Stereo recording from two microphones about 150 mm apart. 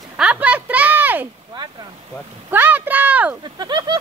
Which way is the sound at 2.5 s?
10° right (ahead or behind).